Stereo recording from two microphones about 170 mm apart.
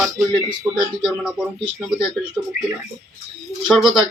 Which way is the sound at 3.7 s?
Centre (ahead or behind).